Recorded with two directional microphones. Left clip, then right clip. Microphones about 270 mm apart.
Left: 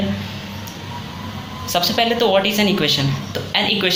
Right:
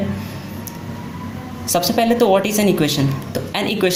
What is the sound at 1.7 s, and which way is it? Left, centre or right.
Speech, right.